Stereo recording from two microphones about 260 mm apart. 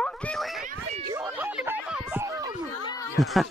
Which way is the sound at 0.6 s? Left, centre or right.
Right.